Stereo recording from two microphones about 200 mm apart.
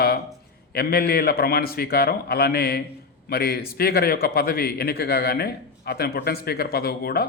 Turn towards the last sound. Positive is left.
turn(degrees=50)  # may be behind; listen again after turning